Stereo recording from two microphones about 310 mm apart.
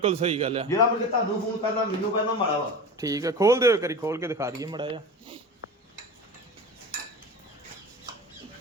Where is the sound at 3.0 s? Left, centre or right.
Centre.